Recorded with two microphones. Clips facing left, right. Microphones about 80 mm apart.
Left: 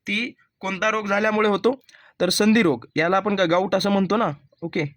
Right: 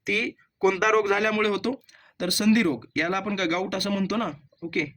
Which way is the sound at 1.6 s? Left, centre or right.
Left.